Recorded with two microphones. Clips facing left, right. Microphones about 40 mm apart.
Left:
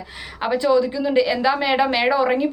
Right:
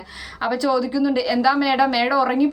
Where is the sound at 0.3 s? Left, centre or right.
Left.